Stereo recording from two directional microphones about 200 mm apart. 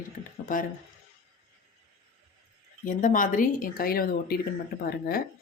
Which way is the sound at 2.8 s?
40° left (ahead or behind).